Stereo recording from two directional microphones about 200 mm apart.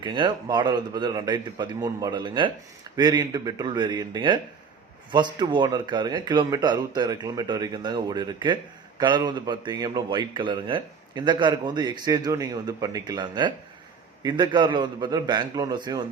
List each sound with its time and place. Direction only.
0.0 s a man's voice: 20° right (ahead or behind)